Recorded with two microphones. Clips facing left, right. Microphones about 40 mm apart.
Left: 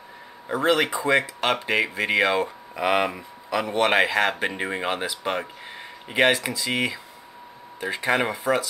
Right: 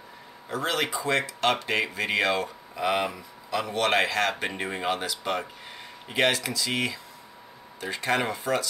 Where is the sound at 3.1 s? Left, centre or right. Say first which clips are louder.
Left 3 dB; left.